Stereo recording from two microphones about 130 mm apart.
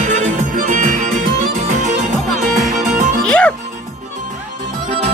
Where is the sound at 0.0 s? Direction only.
70° right (ahead or behind); by 0.9 s 90° right.